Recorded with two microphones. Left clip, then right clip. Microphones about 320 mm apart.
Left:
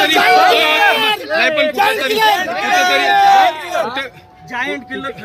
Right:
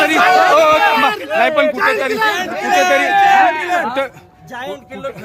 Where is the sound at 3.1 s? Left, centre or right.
Left.